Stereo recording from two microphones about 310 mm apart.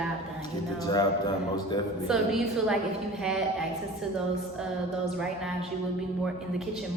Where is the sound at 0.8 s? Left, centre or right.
Centre.